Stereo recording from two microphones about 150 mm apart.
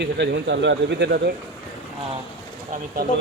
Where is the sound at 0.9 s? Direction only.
90° right.